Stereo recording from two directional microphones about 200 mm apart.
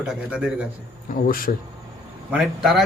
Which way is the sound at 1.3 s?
45° left (ahead or behind).